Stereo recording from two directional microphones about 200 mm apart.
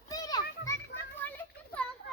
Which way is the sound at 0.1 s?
20° left (ahead or behind).